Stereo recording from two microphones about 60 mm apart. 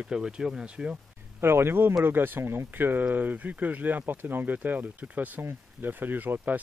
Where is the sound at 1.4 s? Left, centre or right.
Right.